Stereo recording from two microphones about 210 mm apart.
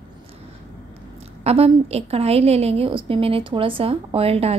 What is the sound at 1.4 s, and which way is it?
A woman's voice, 30° right (ahead or behind).